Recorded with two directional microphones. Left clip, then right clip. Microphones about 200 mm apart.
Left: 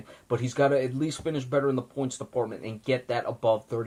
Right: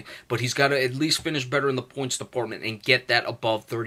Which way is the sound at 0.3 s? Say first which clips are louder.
Right 2 dB; 15° right (ahead or behind).